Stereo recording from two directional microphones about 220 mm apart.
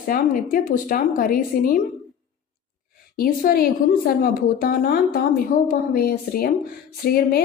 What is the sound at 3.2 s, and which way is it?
A woman's voice, 40° left (ahead or behind).